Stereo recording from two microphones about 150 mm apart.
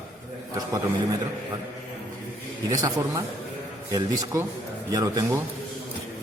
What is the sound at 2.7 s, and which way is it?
A man's voice, 25° right (ahead or behind).